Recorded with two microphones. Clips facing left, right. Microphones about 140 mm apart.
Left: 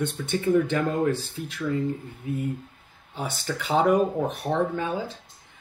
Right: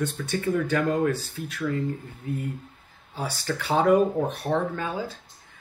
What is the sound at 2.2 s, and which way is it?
Speech, 20° left (ahead or behind).